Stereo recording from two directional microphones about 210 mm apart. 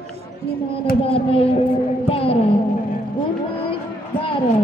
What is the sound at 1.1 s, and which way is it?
Speech, 25° left (ahead or behind).